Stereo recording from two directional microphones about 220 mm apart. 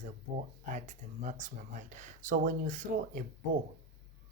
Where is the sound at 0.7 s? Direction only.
35° right (ahead or behind).